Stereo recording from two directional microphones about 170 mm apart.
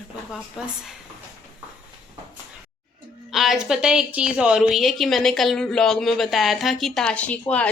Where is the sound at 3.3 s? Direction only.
Centre (ahead or behind).